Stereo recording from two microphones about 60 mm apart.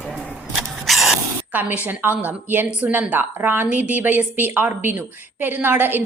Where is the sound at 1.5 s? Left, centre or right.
Right.